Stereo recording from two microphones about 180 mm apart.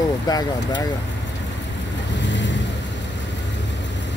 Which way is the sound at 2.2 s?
85° left.